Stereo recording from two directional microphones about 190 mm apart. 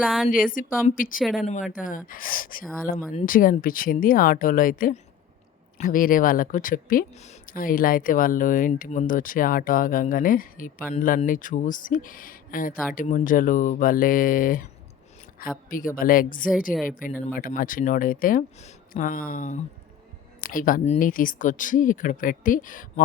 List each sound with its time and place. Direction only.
0.0 s speech: centre (ahead or behind)
0.9 s speech: 45° left (ahead or behind)